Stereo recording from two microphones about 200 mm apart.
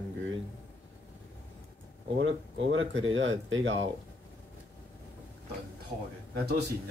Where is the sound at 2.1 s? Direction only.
70° right (ahead or behind).